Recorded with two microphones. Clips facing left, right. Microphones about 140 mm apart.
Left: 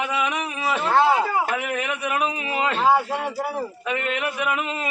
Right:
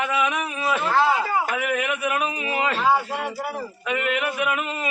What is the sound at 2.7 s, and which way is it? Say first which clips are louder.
Speech: left 3 dB; 25° left (ahead or behind).